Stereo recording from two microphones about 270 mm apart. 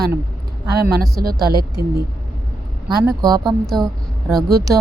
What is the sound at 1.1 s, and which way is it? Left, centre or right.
Speech, right.